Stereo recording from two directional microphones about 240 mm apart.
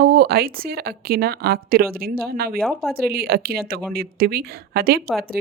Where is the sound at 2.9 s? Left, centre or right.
Right.